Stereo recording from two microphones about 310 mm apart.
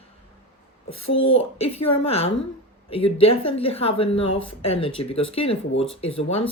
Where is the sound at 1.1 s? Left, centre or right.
Centre.